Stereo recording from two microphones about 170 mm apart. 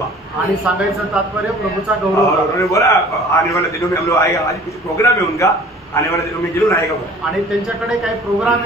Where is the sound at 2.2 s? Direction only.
20° left (ahead or behind).